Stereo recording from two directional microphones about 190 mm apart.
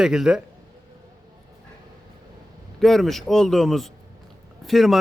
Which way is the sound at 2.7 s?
Centre (ahead or behind).